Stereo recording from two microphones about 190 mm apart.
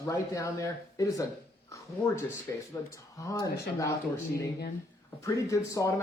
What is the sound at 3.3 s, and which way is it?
Speech, 15° left (ahead or behind).